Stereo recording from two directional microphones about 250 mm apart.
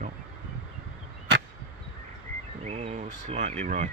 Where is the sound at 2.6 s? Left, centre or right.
Right.